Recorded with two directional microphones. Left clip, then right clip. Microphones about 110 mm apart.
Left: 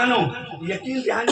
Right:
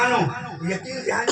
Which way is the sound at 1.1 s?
30° left (ahead or behind).